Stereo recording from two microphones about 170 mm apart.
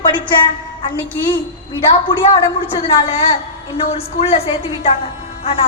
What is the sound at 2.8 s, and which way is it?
A woman's voice, 35° left (ahead or behind).